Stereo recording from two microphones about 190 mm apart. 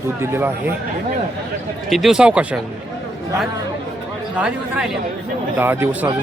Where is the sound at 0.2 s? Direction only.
10° right (ahead or behind).